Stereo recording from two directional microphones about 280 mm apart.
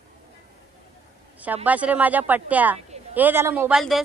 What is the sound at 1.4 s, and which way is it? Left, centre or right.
A woman's voice, centre.